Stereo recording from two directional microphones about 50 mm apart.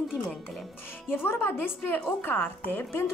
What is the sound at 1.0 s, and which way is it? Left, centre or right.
Speech, left.